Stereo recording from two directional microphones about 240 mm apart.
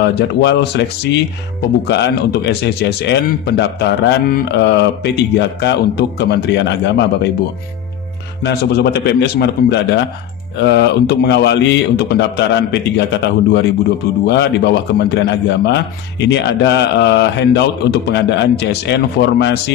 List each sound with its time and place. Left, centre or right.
0.0 s a man's voice: left
8.5 s a man's voice: left